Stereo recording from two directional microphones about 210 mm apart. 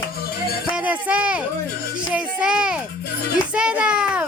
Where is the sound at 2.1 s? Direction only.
5° right (ahead or behind).